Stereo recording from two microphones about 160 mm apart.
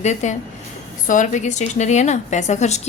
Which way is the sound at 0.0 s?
45° left (ahead or behind).